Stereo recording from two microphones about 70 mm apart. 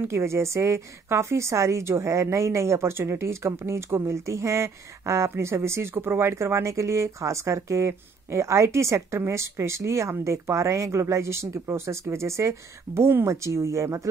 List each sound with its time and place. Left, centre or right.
0.1 s a woman's voice: right